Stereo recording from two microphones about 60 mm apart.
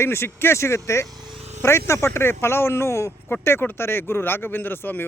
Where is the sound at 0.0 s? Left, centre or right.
Left.